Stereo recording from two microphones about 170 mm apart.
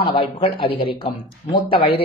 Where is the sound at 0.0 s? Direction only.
30° left (ahead or behind).